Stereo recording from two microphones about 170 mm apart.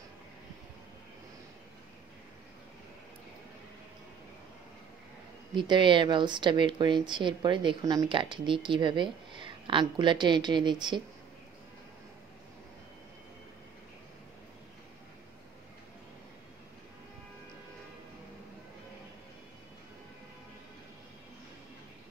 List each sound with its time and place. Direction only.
5.5 s a woman's voice: 30° right (ahead or behind)